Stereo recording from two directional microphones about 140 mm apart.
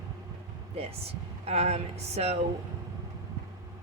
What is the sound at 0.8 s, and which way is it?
Speech, 45° right (ahead or behind).